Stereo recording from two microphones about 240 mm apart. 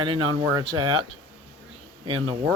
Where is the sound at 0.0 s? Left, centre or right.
Right.